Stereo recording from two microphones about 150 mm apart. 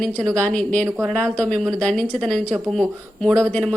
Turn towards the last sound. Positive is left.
turn(degrees=5)  # may be behind; listen again after turning